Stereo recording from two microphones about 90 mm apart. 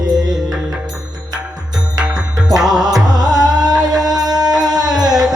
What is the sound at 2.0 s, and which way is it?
Music, 10° right (ahead or behind).